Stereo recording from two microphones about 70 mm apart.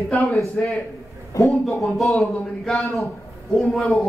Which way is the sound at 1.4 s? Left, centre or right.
Left.